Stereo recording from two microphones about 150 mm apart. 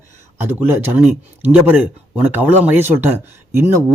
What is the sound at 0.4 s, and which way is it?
A man's voice, 15° right (ahead or behind).